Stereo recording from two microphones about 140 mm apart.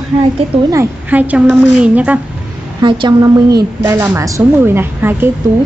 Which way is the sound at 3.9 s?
15° right (ahead or behind).